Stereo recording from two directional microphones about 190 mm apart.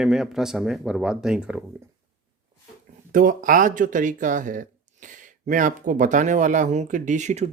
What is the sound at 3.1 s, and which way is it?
Speech, 45° right (ahead or behind).